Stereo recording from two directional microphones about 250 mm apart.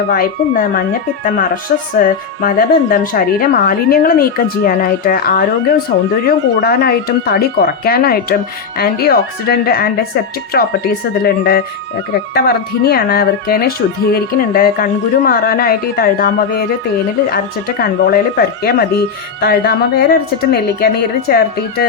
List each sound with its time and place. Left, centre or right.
0.1 s speech: left
2.0 s speech: left